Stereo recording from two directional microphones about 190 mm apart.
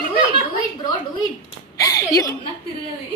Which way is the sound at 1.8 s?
15° left (ahead or behind).